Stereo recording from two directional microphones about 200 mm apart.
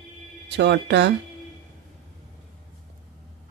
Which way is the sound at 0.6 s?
60° right (ahead or behind).